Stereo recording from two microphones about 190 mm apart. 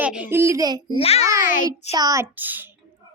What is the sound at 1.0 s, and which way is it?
Speech, 30° left (ahead or behind).